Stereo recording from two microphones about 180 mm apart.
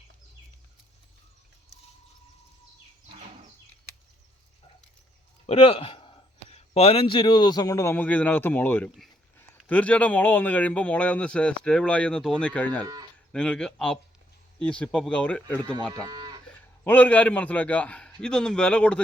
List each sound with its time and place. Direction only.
5.5 s speech: 30° left (ahead or behind); by 12.8 s 10° left (ahead or behind)
12.8 s speech: 20° right (ahead or behind)
13.3 s a man's voice: 5° left (ahead or behind)
15.9 s moo: 20° right (ahead or behind)
16.8 s a man's voice: 10° left (ahead or behind)